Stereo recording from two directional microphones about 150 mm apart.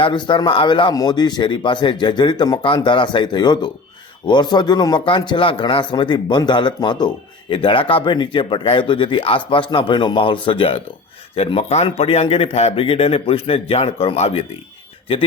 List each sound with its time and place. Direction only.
0.0 s speech: 30° left (ahead or behind)